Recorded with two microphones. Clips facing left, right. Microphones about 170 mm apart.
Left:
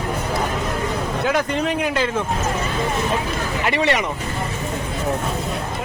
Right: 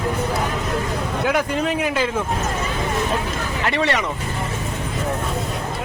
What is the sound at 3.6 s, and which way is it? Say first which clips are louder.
Speech: left 1 dB; 15° left (ahead or behind).